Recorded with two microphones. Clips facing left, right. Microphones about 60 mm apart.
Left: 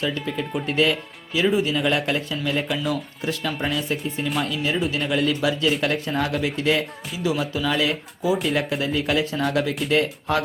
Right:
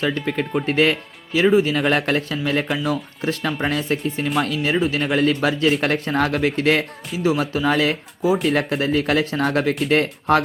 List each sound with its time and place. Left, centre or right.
0.5 s speech: right
1.7 s speech: right
3.9 s speech: right
4.4 s speech: right
8.4 s speech: right
8.8 s speech: right